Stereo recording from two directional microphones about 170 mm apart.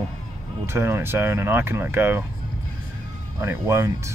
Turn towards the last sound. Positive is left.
turn(degrees=-15)  # may be behind; listen again after turning